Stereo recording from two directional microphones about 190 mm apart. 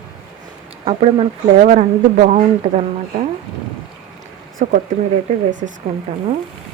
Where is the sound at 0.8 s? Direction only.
30° right (ahead or behind).